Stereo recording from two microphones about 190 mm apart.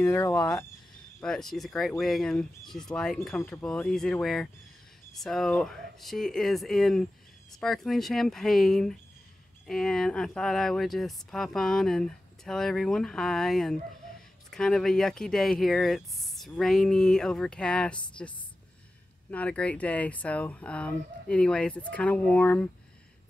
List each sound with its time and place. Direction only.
0.0 s speech: 15° left (ahead or behind)
1.2 s speech: centre (ahead or behind)
19.3 s speech: 5° left (ahead or behind)